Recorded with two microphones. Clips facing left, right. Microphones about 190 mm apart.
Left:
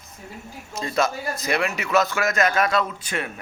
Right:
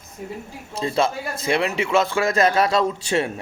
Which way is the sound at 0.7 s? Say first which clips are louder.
Right 2 dB; 30° right (ahead or behind).